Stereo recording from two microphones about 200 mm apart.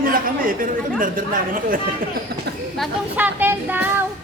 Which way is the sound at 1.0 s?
40° right (ahead or behind).